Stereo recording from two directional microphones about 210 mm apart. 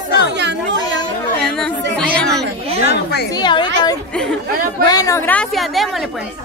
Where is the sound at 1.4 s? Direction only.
5° left (ahead or behind).